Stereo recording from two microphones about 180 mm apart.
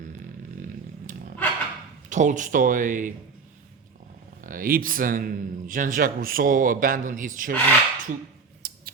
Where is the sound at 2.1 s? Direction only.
45° right (ahead or behind).